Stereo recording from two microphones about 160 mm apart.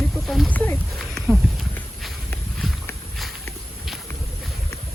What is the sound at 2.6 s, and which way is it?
Dog, centre (ahead or behind).